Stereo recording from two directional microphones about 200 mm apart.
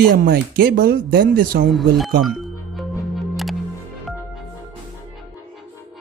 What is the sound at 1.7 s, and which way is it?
Speech, centre (ahead or behind).